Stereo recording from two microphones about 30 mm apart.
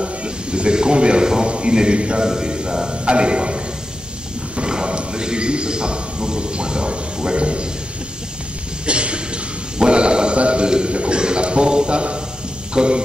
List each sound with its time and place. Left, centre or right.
0.0 s a man's voice: right
2.2 s a man's voice: right
4.6 s a sound: right
5.1 s a man's voice: right
8.8 s a man's voice: right